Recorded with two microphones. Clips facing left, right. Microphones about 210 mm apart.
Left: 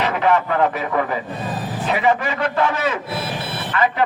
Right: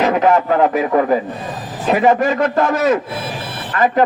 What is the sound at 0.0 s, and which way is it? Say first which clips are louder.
A man's voice: right 5 dB; 45° right (ahead or behind).